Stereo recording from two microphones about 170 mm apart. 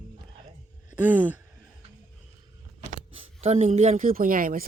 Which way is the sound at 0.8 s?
10° right (ahead or behind).